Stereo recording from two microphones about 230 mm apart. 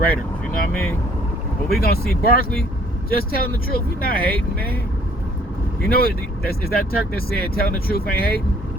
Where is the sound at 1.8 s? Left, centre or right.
Left.